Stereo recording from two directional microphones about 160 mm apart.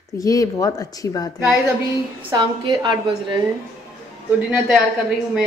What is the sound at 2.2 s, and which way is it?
Speech, 25° right (ahead or behind).